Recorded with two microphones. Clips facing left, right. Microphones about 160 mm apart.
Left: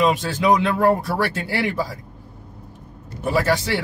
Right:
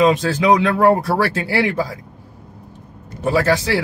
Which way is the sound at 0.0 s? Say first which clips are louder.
Right 4 dB; 85° right.